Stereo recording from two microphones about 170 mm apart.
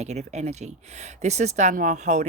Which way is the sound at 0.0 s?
40° right (ahead or behind).